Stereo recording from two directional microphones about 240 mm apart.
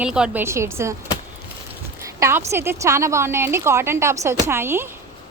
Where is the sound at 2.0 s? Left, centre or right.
Centre.